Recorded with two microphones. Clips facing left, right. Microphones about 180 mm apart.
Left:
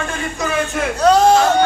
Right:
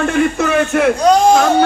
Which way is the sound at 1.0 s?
10° right (ahead or behind).